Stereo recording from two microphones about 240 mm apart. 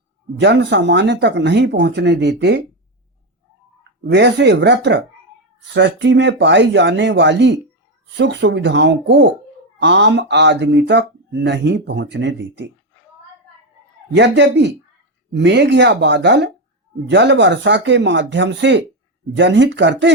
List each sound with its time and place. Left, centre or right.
0.3 s speech: right
4.0 s speech: right
14.1 s speech: right